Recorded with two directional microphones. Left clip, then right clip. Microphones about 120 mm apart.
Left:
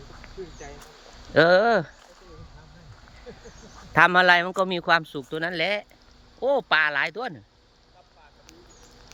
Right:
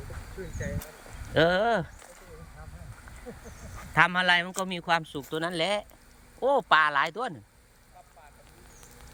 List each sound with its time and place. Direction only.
1.3 s a man's voice: 35° left (ahead or behind)
3.9 s a man's voice: 50° left (ahead or behind); by 7.3 s 15° left (ahead or behind)